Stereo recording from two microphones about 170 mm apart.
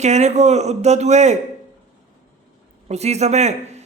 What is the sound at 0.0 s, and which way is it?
A man's voice, 40° right (ahead or behind).